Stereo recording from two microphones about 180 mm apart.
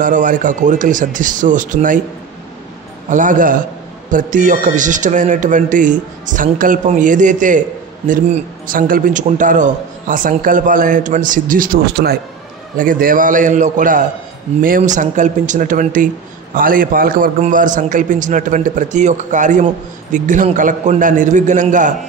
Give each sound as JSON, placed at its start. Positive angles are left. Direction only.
{"t": 0.0, "sound": "a man's voice", "side_deg": -45}
{"t": 3.1, "sound": "a man's voice", "side_deg": -45}